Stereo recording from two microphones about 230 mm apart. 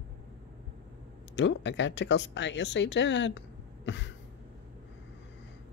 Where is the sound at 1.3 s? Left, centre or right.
Left.